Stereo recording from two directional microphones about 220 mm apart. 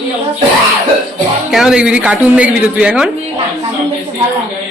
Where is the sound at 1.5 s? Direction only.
Centre (ahead or behind).